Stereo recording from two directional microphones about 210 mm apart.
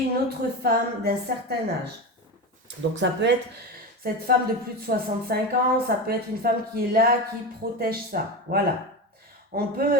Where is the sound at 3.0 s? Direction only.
60° right (ahead or behind).